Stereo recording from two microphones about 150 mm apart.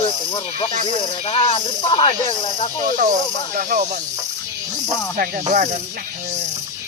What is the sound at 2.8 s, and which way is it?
Speech, 55° right (ahead or behind).